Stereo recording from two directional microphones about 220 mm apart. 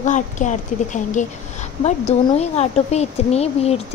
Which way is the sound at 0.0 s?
35° left (ahead or behind).